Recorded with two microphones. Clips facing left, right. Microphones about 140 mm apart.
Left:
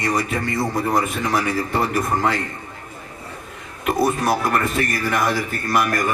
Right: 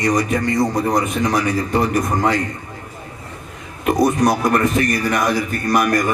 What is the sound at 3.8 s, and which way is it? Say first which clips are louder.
A man's voice: right 4 dB; 20° right (ahead or behind).